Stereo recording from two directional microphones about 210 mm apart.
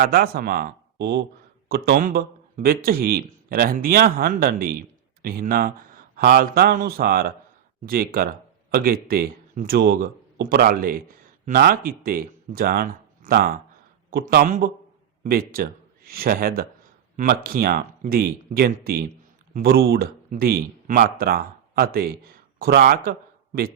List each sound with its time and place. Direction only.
0.0 s a man's voice: 45° right (ahead or behind)